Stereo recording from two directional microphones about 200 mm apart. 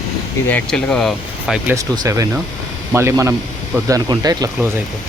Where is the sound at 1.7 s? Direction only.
15° right (ahead or behind).